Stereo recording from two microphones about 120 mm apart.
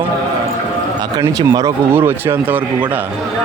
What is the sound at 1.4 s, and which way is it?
Speech, 30° right (ahead or behind).